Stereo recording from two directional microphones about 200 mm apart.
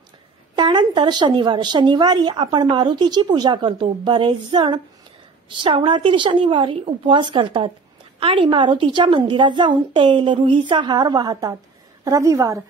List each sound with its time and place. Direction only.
0.6 s a woman's voice: 25° right (ahead or behind)